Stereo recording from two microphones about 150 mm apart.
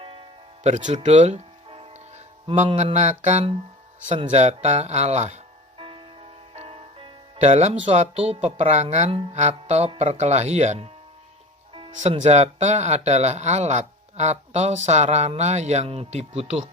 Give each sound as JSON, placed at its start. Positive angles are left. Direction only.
{"t": 0.0, "sound": "music", "side_deg": -35}
{"t": 0.6, "sound": "speech", "side_deg": -50}
{"t": 1.0, "sound": "music", "side_deg": -50}
{"t": 2.6, "sound": "speech", "side_deg": -45}
{"t": 6.5, "sound": "music", "side_deg": -45}
{"t": 7.9, "sound": "speech", "side_deg": -40}
{"t": 11.9, "sound": "speech", "side_deg": -50}